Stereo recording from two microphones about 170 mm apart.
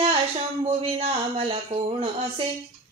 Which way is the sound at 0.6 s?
35° right (ahead or behind).